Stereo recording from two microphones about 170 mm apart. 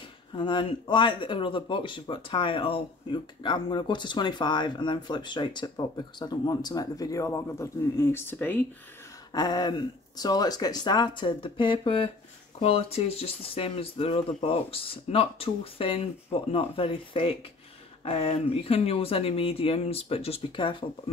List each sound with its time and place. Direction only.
0.3 s speech: 30° left (ahead or behind); by 8.6 s 10° left (ahead or behind)
9.3 s speech: 25° left (ahead or behind)